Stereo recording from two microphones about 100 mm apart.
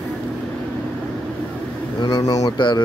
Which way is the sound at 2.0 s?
40° left (ahead or behind).